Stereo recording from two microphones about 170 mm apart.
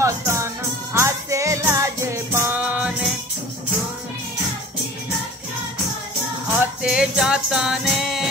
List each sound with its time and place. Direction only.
0.0 s music: 15° right (ahead or behind)
6.6 s music: 5° right (ahead or behind)